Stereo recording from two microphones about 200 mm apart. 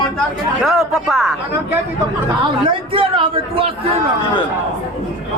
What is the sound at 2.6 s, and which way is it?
Speech, 25° right (ahead or behind).